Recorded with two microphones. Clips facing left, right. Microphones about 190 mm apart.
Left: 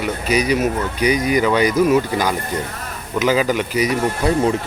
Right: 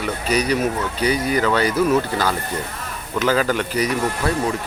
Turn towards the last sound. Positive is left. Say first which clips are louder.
# left 3 dB
turn(degrees=10)  # may be behind; listen again after turning